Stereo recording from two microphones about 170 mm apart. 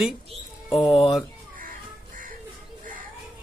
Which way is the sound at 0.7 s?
30° left (ahead or behind).